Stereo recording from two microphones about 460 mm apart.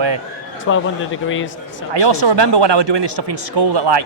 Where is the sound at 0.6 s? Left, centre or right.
Left.